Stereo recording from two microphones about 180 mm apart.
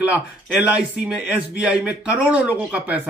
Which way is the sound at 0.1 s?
5° right (ahead or behind).